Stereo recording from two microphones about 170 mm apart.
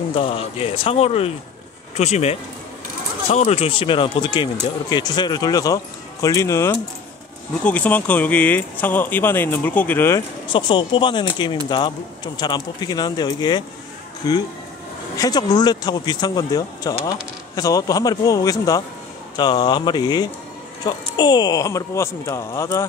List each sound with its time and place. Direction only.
0.1 s speech: 35° left (ahead or behind); by 10.2 s 15° left (ahead or behind)
10.5 s speech: 30° left (ahead or behind)